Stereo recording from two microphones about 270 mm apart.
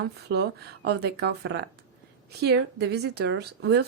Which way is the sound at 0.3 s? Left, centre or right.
Right.